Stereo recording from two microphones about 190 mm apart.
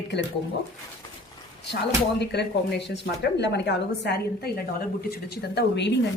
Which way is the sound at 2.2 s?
60° left (ahead or behind).